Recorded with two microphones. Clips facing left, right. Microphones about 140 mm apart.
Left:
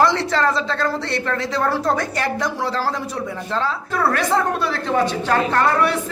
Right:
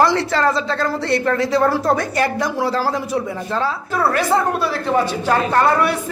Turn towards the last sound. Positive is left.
turn(degrees=-10)  # may be behind; listen again after turning